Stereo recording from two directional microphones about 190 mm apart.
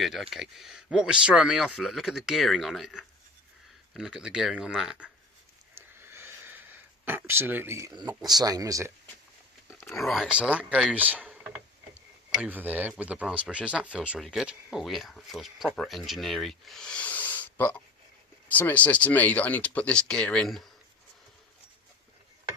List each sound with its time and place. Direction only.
0.0 s speech: centre (ahead or behind)
5.7 s a sound: 15° right (ahead or behind)
8.2 s speech: 20° right (ahead or behind)
9.8 s speech: centre (ahead or behind)
12.4 s speech: 10° right (ahead or behind)